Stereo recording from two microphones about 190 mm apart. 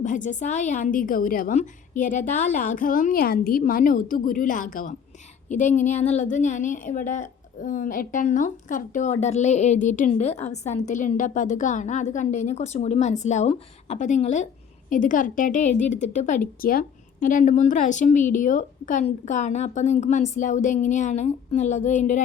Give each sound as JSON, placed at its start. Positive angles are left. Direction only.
{"t": 0.0, "sound": "a woman's voice", "side_deg": 40}